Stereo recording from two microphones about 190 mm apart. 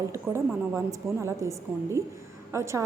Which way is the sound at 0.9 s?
15° right (ahead or behind).